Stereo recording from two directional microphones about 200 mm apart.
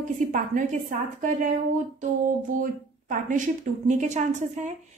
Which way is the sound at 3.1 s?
40° right (ahead or behind).